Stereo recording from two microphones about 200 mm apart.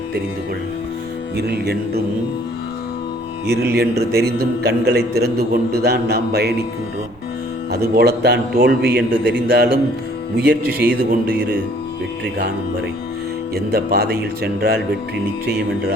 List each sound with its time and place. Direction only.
1.4 s a man's voice: 55° right (ahead or behind)
3.4 s a man's voice: 55° right (ahead or behind)
7.7 s a man's voice: 50° right (ahead or behind)
13.7 s a man's voice: 50° right (ahead or behind)